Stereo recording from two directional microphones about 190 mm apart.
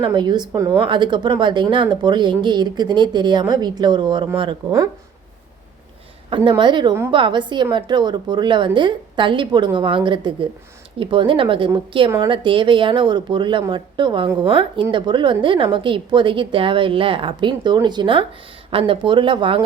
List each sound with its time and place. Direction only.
0.0 s a woman's voice: 25° right (ahead or behind)
6.3 s a woman's voice: 25° right (ahead or behind)